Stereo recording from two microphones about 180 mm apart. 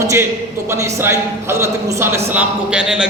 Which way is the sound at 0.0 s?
15° right (ahead or behind).